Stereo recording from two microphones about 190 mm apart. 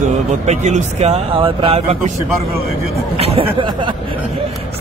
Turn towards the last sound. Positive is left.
turn(degrees=-30)  # may be behind; listen again after turning